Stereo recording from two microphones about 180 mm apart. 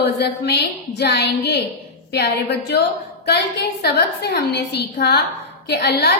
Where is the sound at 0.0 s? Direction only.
70° left (ahead or behind).